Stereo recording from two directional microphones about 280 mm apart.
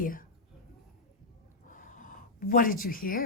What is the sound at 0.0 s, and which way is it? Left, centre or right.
Whispering, left.